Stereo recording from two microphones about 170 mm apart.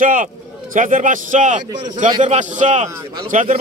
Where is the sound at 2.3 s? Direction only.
45° right (ahead or behind).